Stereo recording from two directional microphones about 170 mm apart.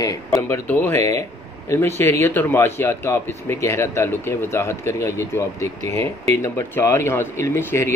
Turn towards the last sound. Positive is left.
turn(degrees=15)  # may be behind; listen again after turning